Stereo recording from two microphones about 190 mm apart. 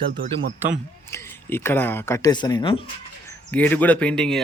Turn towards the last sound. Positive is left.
turn(degrees=5)  # may be behind; listen again after turning